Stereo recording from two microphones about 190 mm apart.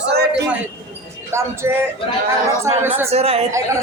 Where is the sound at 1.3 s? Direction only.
15° right (ahead or behind).